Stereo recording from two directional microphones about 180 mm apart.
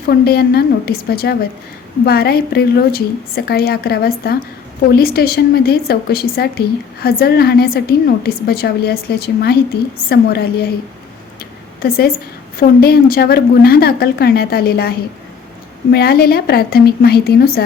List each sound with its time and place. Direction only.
0.1 s a woman's voice: 60° left (ahead or behind)
11.3 s a sound: 60° left (ahead or behind)
12.5 s a woman's voice: 55° left (ahead or behind)